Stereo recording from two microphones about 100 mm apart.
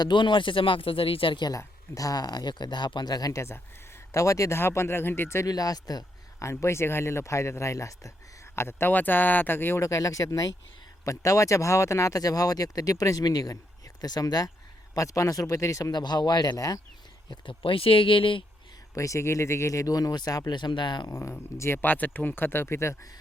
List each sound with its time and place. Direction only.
0.0 s speech: 50° left (ahead or behind)
1.5 s speech: 35° left (ahead or behind)
5.5 s speech: 40° left (ahead or behind)
6.5 s speech: 30° left (ahead or behind)
15.9 s speech: 45° left (ahead or behind)
17.4 s speech: 60° left (ahead or behind)
18.9 s speech: 30° left (ahead or behind); by 21.1 s 50° left (ahead or behind)
21.1 s speech: 25° left (ahead or behind)